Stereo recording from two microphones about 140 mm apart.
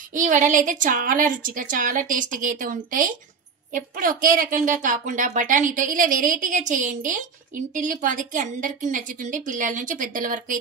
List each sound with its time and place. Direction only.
0.1 s a woman's voice: 65° right (ahead or behind)